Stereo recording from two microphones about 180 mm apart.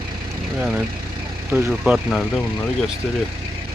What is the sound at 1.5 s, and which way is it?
Speech, 10° right (ahead or behind).